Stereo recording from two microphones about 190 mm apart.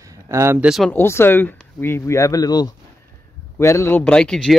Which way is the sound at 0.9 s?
10° left (ahead or behind).